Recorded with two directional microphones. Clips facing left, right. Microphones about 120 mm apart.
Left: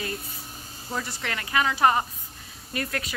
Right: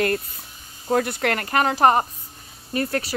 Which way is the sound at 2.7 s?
35° right (ahead or behind).